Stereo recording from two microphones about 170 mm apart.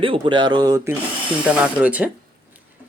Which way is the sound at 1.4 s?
5° right (ahead or behind).